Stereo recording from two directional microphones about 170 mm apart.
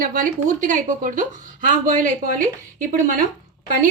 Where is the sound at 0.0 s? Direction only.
55° right (ahead or behind).